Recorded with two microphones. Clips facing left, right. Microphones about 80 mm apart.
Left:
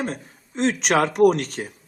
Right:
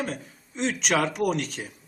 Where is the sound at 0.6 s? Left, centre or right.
Left.